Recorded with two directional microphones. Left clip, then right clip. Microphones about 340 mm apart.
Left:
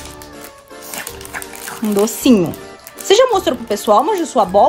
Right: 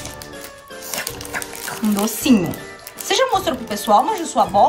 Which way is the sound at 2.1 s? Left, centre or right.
Centre.